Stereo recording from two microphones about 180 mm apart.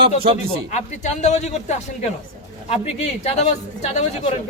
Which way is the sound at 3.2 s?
35° left (ahead or behind).